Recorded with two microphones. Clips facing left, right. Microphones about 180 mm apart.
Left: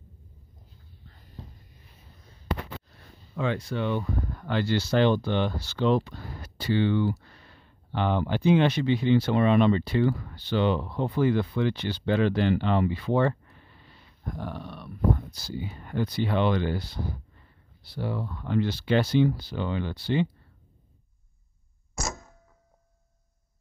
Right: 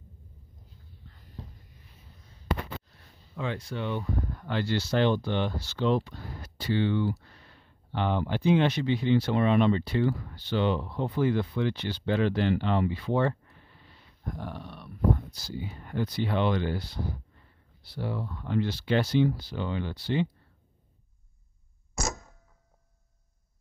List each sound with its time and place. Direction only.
3.3 s speech: 85° left
14.4 s a sound: 90° left
15.4 s speech: 90° left
17.9 s speech: 90° left